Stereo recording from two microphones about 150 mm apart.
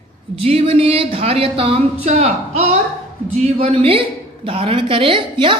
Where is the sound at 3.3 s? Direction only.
45° right (ahead or behind).